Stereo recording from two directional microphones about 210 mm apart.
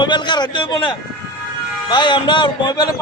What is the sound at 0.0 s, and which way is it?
A man's voice, 20° left (ahead or behind).